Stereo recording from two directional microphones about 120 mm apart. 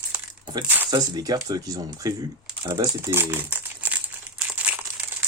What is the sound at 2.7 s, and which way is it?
Crumpling, 20° right (ahead or behind).